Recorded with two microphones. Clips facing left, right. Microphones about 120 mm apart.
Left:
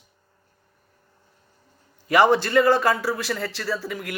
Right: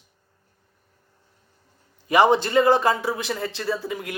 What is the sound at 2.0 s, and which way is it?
A man's voice, 20° right (ahead or behind).